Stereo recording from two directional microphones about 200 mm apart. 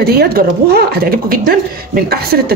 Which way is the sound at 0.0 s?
50° right (ahead or behind).